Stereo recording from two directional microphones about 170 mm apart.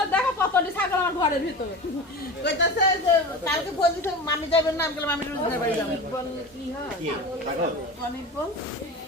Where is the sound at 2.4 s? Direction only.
90° left.